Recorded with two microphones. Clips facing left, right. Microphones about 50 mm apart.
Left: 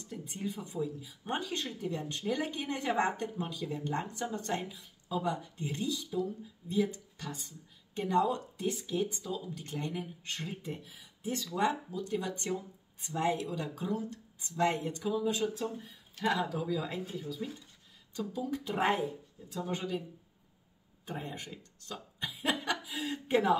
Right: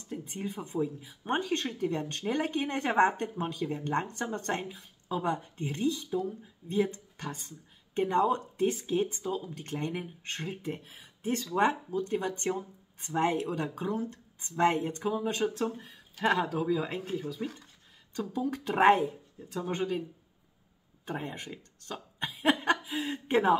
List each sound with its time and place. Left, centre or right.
0.1 s a sound: right
0.7 s speech: right
19.7 s speech: right
21.0 s chuckle: right